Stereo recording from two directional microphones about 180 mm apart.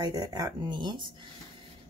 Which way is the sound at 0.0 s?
20° right (ahead or behind).